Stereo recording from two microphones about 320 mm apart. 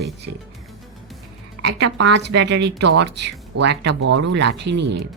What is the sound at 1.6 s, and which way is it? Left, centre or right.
Speech, right.